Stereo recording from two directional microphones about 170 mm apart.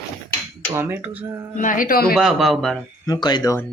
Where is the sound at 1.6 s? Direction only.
50° left (ahead or behind).